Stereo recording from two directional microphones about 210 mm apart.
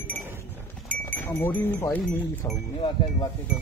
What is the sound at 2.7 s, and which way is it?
Speech, 25° left (ahead or behind).